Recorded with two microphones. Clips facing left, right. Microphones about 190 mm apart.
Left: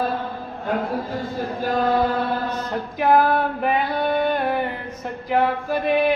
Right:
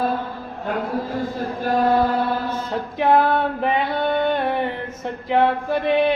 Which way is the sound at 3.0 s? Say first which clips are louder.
Even; 25° right (ahead or behind).